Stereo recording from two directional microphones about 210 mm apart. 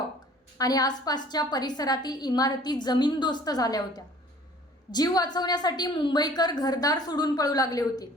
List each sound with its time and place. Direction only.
0.6 s a woman's voice: 20° left (ahead or behind)